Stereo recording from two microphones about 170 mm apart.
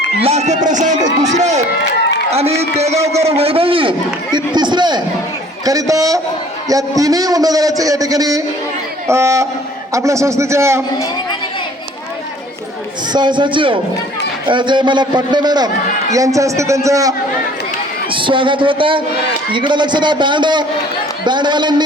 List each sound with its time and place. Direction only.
0.2 s a man's voice: 40° right (ahead or behind); by 10.8 s 15° right (ahead or behind)
13.1 s a man's voice: 25° right (ahead or behind)
18.1 s a man's voice: 30° right (ahead or behind)